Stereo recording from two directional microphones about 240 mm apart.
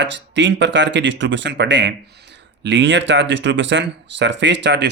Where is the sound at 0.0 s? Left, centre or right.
Right.